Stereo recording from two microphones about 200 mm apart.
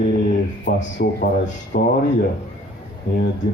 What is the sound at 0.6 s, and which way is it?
Speech, 50° left (ahead or behind).